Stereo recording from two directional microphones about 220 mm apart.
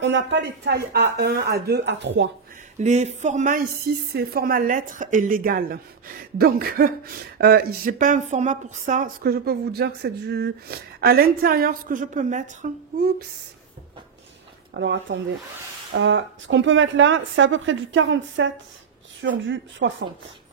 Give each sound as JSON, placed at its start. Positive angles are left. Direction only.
{"t": 0.0, "sound": "speech", "side_deg": -55}
{"t": 2.8, "sound": "a woman's voice", "side_deg": -30}
{"t": 4.1, "sound": "a woman's voice", "side_deg": -45}
{"t": 12.9, "sound": "a sound", "side_deg": -40}
{"t": 14.7, "sound": "a woman's voice", "side_deg": -55}